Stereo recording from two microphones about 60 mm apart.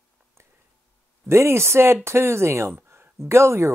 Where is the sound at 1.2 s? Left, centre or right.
Right.